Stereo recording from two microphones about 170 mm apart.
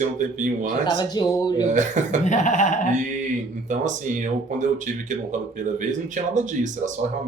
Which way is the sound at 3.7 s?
45° right (ahead or behind).